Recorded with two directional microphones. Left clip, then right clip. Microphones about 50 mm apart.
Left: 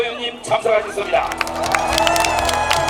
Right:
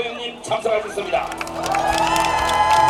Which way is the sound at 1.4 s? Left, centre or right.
Left.